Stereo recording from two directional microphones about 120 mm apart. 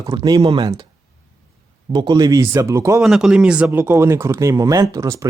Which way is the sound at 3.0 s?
5° right (ahead or behind).